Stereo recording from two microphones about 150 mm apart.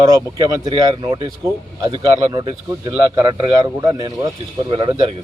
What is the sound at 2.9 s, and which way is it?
Speech, 20° right (ahead or behind).